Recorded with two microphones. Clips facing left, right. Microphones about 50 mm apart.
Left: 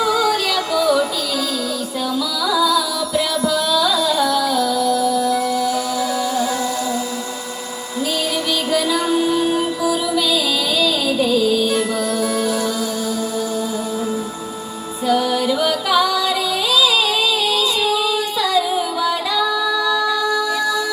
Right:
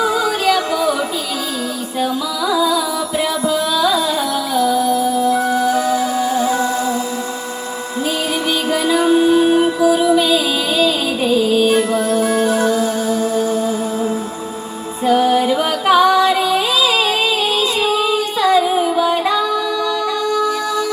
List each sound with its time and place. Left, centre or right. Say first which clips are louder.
0.0 s music: right 1 dB; right
2.5 s music: right 1 dB; right
8.7 s music: right 4 dB; right
15.0 s music: right 4 dB; right